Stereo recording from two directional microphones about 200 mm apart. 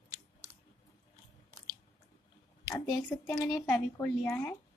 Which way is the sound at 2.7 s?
15° left (ahead or behind).